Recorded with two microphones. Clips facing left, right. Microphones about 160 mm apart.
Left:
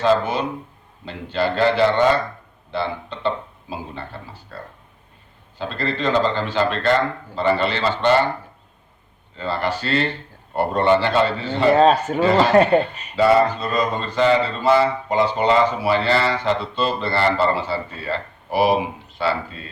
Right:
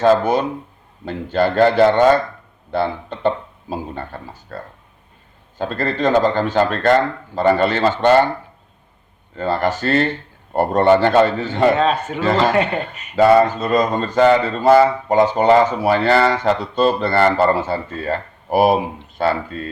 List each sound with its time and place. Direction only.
0.0 s speech: 45° right (ahead or behind)
9.3 s speech: 45° right (ahead or behind)
11.7 s a man's voice: 40° left (ahead or behind)
12.2 s speech: 45° right (ahead or behind)